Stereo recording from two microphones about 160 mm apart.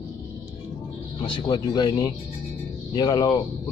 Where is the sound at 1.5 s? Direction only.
25° left (ahead or behind).